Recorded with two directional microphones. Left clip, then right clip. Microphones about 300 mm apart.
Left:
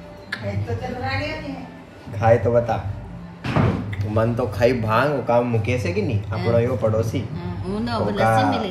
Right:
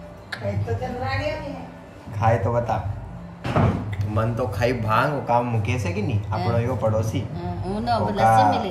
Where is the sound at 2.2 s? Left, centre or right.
Centre.